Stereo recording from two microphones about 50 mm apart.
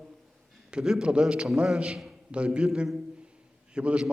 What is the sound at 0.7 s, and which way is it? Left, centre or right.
A man's voice, centre.